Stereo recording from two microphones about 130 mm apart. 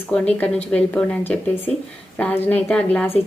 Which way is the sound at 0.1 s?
10° left (ahead or behind).